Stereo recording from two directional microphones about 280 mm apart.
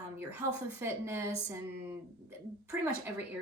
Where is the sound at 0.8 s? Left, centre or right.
Centre.